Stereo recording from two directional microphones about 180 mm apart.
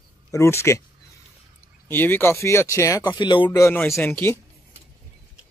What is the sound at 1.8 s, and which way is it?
Speech, 10° left (ahead or behind).